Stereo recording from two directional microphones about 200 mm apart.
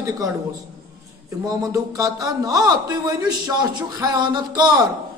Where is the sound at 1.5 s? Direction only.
15° right (ahead or behind).